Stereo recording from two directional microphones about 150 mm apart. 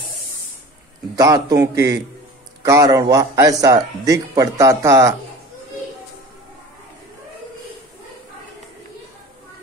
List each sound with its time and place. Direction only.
1.1 s a man's voice: 25° right (ahead or behind)